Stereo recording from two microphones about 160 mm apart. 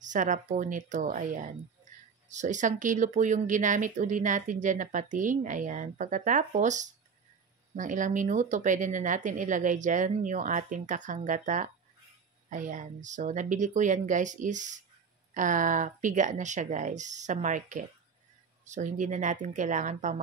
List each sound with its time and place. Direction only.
0.0 s speech: 50° right (ahead or behind)
1.9 s a sound: 55° right (ahead or behind)
2.2 s speech: 50° right (ahead or behind)